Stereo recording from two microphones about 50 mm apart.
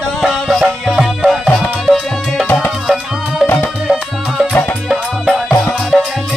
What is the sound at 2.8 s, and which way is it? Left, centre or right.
Music, centre.